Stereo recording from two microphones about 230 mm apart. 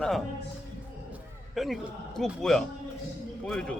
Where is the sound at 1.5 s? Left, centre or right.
Centre.